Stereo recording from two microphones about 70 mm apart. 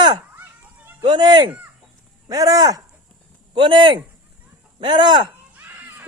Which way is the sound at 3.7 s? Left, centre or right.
Right.